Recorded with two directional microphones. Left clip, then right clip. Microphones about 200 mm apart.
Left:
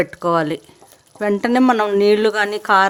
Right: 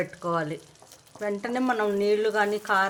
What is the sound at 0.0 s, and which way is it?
Speech, 60° left (ahead or behind).